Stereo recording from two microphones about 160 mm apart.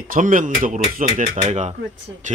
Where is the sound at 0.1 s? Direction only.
55° right (ahead or behind).